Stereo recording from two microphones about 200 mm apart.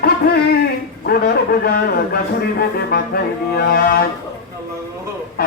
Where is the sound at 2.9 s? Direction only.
50° left (ahead or behind).